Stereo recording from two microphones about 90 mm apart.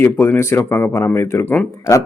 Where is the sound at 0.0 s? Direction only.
25° left (ahead or behind).